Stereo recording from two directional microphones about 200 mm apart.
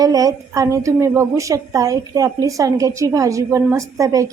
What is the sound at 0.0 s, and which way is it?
A woman's voice, 20° right (ahead or behind).